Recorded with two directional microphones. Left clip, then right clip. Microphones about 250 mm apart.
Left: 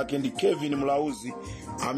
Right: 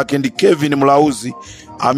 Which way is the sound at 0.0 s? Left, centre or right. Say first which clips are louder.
Right 12 dB; right.